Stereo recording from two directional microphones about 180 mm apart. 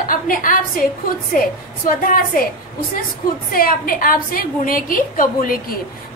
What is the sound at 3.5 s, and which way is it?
A woman's voice, 55° left (ahead or behind).